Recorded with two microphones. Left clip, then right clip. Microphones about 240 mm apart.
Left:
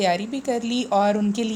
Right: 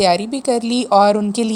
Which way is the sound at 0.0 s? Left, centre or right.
Right.